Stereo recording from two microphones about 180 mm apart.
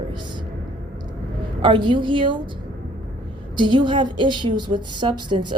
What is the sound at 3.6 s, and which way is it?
A woman's voice, 25° right (ahead or behind).